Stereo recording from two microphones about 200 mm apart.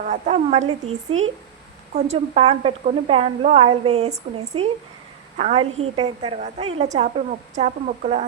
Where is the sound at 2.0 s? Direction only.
30° right (ahead or behind).